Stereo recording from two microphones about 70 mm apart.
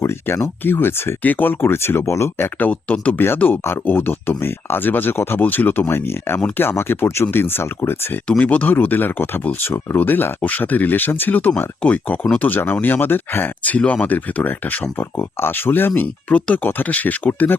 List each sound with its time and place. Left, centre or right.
0.0 s speech: left
2.6 s speech: centre; by 7.9 s left
8.3 s speech: centre
11.8 s speech: centre